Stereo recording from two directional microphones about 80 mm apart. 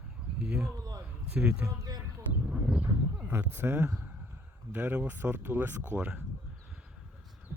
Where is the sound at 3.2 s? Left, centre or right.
Right.